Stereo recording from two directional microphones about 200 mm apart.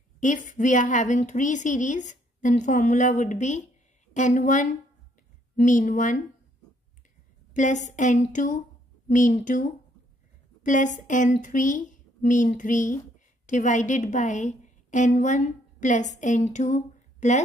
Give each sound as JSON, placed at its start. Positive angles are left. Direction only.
{"t": 0.2, "sound": "a woman's voice", "side_deg": 40}
{"t": 7.5, "sound": "a woman's voice", "side_deg": 35}